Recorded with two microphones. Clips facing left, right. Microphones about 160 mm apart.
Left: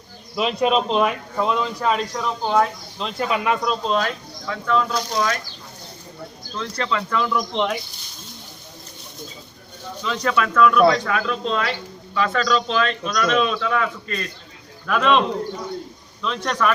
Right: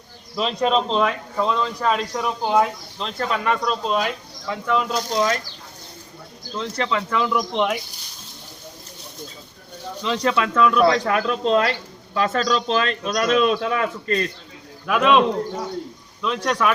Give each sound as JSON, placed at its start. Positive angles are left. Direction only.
{"t": 0.3, "sound": "speech", "side_deg": 10}
{"t": 2.2, "sound": "speech", "side_deg": -15}
{"t": 3.0, "sound": "speech", "side_deg": 5}
{"t": 3.9, "sound": "speech", "side_deg": -15}
{"t": 6.6, "sound": "speech", "side_deg": -20}
{"t": 10.0, "sound": "speech", "side_deg": -25}
{"t": 11.3, "sound": "a man's voice", "side_deg": -35}
{"t": 14.8, "sound": "speech", "side_deg": -10}
{"t": 16.2, "sound": "speech", "side_deg": -5}